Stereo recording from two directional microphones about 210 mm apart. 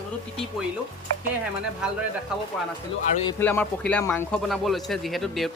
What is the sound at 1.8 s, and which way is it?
Speech, 5° right (ahead or behind).